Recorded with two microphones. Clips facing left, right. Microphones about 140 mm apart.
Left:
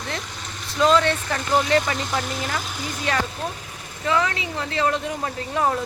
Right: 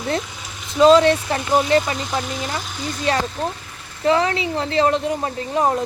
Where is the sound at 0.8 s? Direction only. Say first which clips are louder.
Right 6 dB; 20° right (ahead or behind).